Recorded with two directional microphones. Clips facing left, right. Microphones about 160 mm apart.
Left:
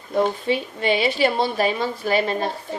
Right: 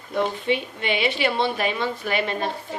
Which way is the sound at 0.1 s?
35° left (ahead or behind).